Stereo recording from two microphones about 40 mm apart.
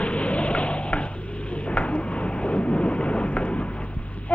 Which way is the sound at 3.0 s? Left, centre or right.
Left.